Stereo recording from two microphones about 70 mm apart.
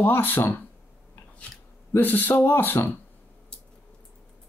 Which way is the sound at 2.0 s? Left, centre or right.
Left.